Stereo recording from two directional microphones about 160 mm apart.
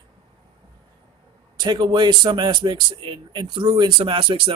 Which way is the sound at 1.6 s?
30° right (ahead or behind).